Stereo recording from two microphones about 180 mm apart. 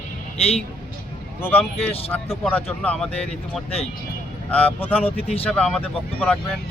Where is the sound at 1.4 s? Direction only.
10° left (ahead or behind).